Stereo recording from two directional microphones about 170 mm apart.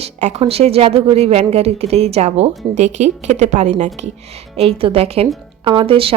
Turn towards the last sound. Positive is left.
turn(degrees=-35)  # may be behind; listen again after turning